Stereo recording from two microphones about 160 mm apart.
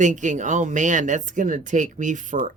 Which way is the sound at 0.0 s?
50° right (ahead or behind).